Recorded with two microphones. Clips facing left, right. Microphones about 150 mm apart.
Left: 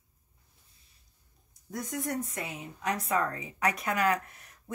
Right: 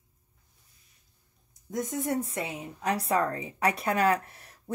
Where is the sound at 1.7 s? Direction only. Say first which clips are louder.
Right 4 dB; 25° right (ahead or behind).